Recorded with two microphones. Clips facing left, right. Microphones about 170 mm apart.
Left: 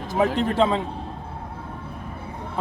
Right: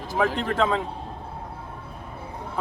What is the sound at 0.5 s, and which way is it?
Speech, 30° left (ahead or behind).